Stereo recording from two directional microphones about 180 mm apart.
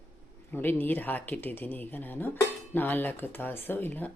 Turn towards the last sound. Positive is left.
turn(degrees=10)  # may be behind; listen again after turning